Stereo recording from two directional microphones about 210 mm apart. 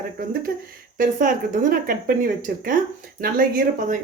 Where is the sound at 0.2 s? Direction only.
45° right (ahead or behind).